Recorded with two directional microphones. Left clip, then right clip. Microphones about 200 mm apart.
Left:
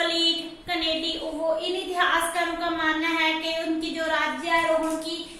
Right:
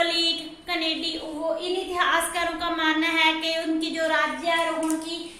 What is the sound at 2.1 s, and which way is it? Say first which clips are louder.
A woman's voice: even; 35° right (ahead or behind).